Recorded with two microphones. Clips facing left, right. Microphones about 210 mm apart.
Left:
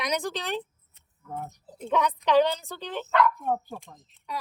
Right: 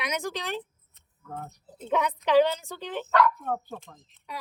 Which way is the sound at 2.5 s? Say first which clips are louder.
Even; 35° left (ahead or behind).